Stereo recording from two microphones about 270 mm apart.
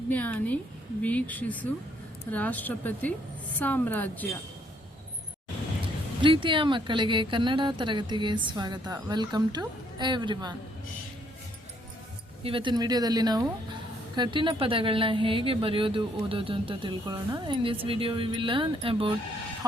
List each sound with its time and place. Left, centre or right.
0.1 s a woman's voice: centre
5.8 s a woman's voice: centre
12.4 s a woman's voice: centre